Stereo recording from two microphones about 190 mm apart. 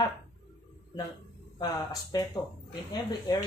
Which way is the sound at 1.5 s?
20° left (ahead or behind).